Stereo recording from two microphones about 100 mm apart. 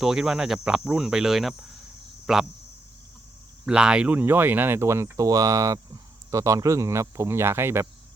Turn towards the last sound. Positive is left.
turn(degrees=-25)  # may be behind; listen again after turning